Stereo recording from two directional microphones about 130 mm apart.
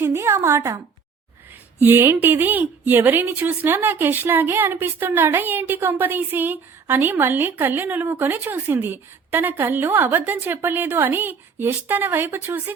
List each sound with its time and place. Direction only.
0.0 s a woman's voice: 20° right (ahead or behind)
1.8 s a woman's voice: 15° right (ahead or behind)